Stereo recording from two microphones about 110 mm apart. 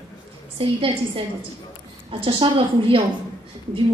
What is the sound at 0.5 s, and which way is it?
Speech, 55° right (ahead or behind).